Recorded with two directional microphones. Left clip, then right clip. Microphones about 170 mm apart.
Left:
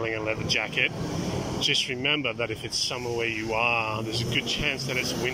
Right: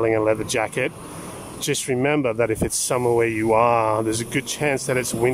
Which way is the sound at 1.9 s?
35° right (ahead or behind).